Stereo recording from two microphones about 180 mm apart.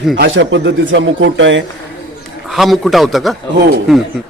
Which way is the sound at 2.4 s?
Centre (ahead or behind).